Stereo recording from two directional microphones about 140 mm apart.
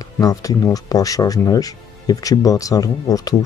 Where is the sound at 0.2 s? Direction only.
25° left (ahead or behind).